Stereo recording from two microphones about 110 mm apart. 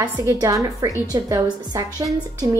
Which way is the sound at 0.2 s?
30° right (ahead or behind).